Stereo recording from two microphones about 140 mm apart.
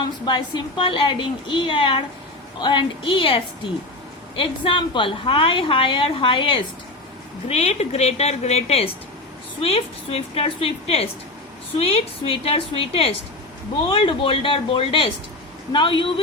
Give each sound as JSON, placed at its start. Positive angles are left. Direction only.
{"t": 0.0, "sound": "a woman's voice", "side_deg": 35}
{"t": 7.4, "sound": "a woman's voice", "side_deg": 50}